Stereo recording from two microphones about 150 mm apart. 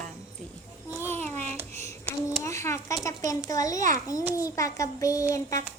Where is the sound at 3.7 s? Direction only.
60° right (ahead or behind).